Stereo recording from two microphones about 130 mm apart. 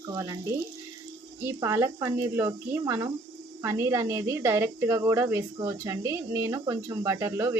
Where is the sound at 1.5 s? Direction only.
25° right (ahead or behind).